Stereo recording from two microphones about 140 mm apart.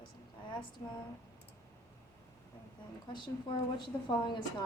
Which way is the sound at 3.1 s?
35° left (ahead or behind).